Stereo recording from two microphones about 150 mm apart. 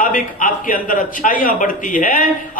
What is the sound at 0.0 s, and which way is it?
A man's voice, 60° left (ahead or behind).